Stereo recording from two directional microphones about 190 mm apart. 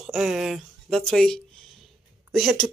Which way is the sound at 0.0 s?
Centre (ahead or behind).